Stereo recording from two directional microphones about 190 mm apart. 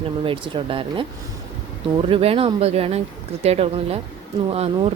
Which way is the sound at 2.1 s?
30° right (ahead or behind).